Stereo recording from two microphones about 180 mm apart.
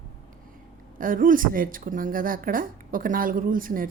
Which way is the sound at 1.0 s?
50° right (ahead or behind).